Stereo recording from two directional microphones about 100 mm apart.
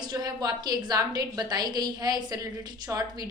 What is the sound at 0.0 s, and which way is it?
A woman's voice, 40° right (ahead or behind).